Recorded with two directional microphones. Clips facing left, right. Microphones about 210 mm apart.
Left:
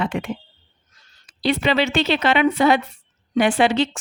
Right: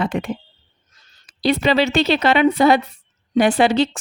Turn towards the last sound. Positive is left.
turn(degrees=-35)  # may be behind; listen again after turning